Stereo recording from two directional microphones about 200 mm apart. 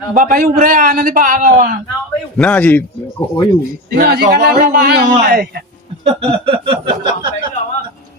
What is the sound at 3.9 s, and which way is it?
A man's voice, 50° right (ahead or behind).